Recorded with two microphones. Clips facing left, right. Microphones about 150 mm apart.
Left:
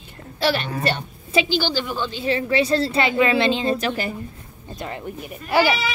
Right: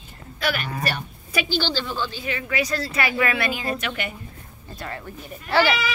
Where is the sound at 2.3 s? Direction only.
30° left (ahead or behind).